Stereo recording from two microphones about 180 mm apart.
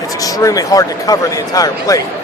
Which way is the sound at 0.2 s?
20° left (ahead or behind).